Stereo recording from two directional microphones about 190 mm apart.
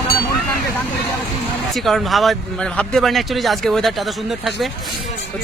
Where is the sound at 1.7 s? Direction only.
Centre (ahead or behind).